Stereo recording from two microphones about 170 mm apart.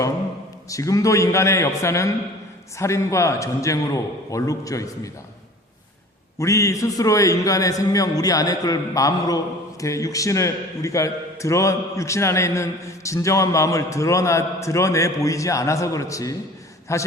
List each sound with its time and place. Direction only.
0.7 s a man's voice: 20° left (ahead or behind)
6.4 s a man's voice: 15° left (ahead or behind)